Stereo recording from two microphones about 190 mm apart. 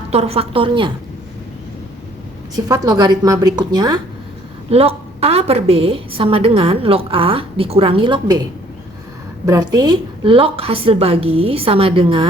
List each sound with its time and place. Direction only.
0.1 s a woman's voice: 30° right (ahead or behind)
2.6 s a woman's voice: 20° right (ahead or behind)
4.7 s a woman's voice: 30° right (ahead or behind)
9.5 s a woman's voice: 20° right (ahead or behind)